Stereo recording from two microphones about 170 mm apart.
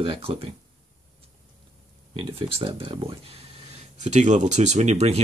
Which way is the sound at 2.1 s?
30° right (ahead or behind).